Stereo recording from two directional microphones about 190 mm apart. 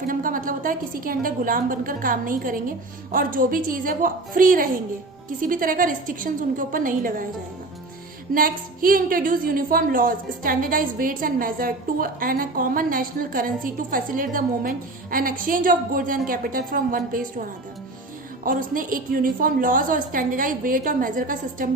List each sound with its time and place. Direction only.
0.1 s a woman's voice: 45° right (ahead or behind)
8.3 s a woman's voice: 50° right (ahead or behind)
18.4 s a woman's voice: 45° right (ahead or behind)